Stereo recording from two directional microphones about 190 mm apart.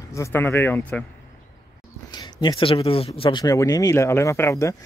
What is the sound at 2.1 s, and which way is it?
Speech, 20° left (ahead or behind).